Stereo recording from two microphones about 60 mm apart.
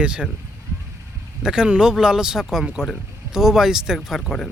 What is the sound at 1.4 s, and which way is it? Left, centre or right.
Speech, centre.